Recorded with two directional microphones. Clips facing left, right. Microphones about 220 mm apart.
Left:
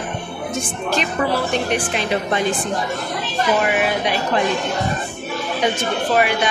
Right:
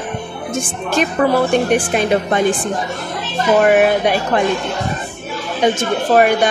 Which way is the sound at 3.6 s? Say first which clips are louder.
Right 7 dB; 50° right (ahead or behind).